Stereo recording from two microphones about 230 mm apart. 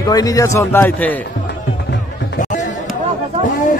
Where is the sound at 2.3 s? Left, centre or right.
Left.